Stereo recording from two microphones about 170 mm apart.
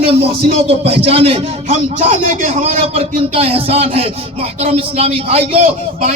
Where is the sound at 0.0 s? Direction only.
35° right (ahead or behind).